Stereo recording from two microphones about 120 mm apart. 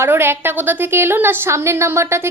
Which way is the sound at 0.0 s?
20° right (ahead or behind).